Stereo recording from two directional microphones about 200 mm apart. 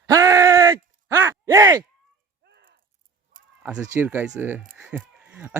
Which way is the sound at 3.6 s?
10° right (ahead or behind).